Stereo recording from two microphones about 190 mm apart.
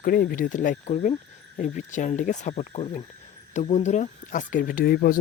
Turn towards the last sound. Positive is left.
turn(degrees=50)  # may be behind; listen again after turning